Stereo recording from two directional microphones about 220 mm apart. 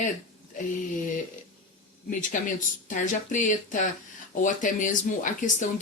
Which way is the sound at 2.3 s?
35° left (ahead or behind).